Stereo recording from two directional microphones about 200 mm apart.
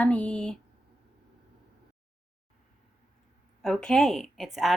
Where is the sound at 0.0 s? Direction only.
5° left (ahead or behind).